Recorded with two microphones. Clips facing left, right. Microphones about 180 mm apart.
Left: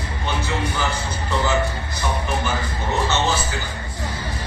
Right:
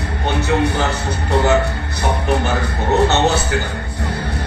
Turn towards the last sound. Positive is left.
turn(degrees=-65)  # may be behind; listen again after turning